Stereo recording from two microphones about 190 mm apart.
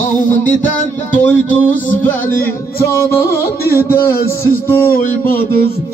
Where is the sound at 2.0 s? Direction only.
10° left (ahead or behind).